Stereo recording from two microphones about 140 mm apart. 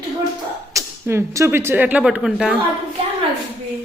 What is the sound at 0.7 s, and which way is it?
A child's voice, 20° right (ahead or behind).